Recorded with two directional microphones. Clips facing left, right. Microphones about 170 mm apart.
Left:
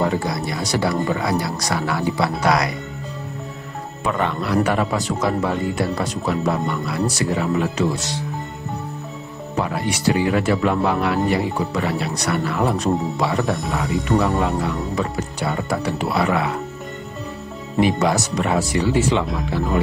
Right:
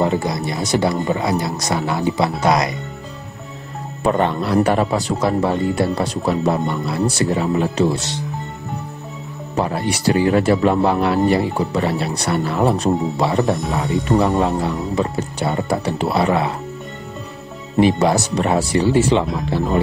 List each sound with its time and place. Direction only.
0.0 s speech: 20° right (ahead or behind)
4.0 s speech: 35° right (ahead or behind)
9.6 s speech: 35° right (ahead or behind)
17.7 s speech: 30° right (ahead or behind)